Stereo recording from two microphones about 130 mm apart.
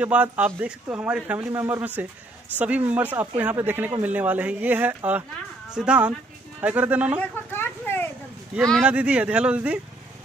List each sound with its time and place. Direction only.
0.0 s speech: 10° right (ahead or behind)
7.2 s a sound: 15° left (ahead or behind)
8.5 s speech: 10° right (ahead or behind)